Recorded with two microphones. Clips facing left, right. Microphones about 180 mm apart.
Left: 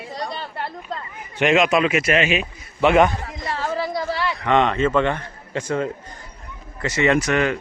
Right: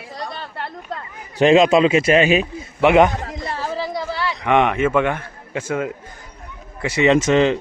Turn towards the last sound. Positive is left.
turn(degrees=-25)  # may be behind; listen again after turning